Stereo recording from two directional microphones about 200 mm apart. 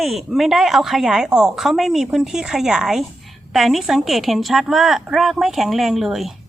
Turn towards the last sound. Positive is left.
turn(degrees=0)  # may be behind; listen again after turning